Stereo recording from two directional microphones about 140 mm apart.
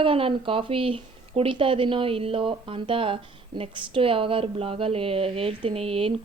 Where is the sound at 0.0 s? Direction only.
40° right (ahead or behind).